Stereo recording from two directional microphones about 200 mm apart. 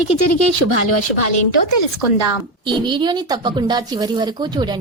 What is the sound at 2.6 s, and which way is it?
A woman's voice, 25° right (ahead or behind).